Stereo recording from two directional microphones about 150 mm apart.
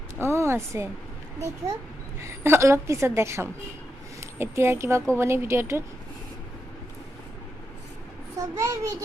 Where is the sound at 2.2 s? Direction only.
15° right (ahead or behind).